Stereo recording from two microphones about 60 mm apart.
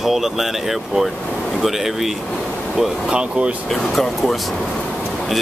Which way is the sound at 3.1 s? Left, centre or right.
Centre.